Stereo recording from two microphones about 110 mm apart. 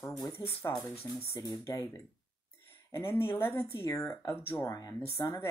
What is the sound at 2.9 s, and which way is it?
Speech, 20° left (ahead or behind).